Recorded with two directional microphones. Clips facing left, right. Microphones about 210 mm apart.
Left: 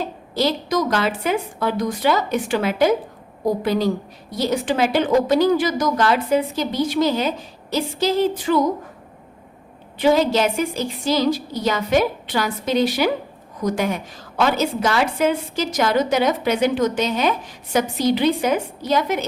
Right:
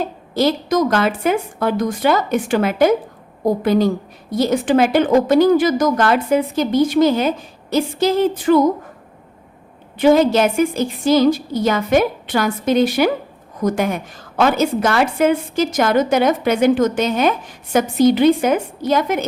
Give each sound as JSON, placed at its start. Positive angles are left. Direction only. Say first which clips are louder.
{"t": 0.0, "sound": "a woman's voice", "louder": "right 4 dB", "side_deg": -50}
{"t": 10.0, "sound": "a woman's voice", "louder": "right 4 dB", "side_deg": -50}